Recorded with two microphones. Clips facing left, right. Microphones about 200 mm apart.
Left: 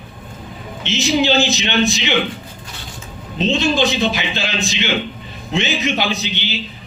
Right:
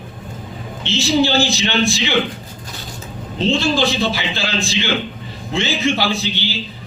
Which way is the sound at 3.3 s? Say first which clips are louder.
Even; 20° left (ahead or behind).